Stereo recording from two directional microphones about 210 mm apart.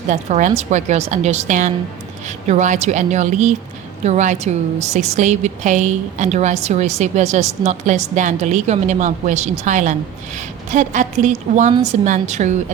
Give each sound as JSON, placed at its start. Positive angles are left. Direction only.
{"t": 0.1, "sound": "a woman's voice", "side_deg": -35}